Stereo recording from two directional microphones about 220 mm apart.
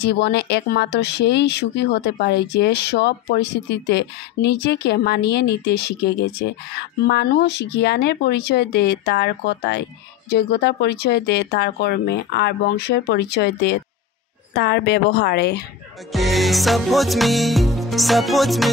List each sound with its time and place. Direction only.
0.0 s speech: 50° left (ahead or behind)
16.1 s music: centre (ahead or behind)